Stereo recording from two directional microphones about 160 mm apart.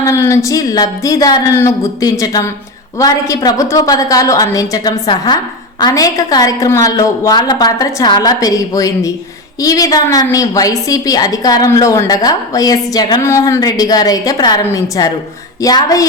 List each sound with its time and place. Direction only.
0.0 s a woman's voice: 15° left (ahead or behind)